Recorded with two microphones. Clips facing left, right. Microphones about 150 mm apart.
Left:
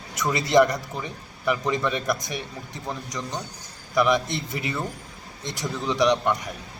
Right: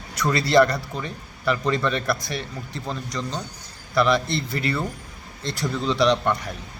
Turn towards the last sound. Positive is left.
turn(degrees=15)  # may be behind; listen again after turning